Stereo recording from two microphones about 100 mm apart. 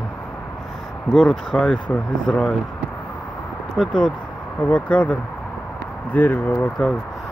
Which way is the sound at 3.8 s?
Centre (ahead or behind).